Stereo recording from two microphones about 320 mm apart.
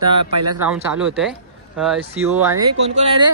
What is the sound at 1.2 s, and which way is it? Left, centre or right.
Speech, centre.